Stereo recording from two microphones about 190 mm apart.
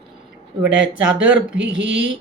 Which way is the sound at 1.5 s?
70° right (ahead or behind).